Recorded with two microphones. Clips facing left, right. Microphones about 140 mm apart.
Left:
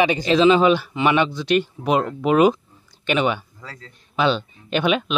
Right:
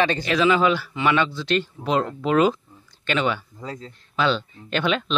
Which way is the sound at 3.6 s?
20° right (ahead or behind).